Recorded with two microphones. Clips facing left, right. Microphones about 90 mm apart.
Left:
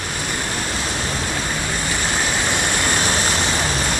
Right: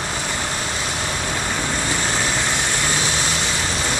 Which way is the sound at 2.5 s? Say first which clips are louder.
Left 2 dB; 55° left (ahead or behind).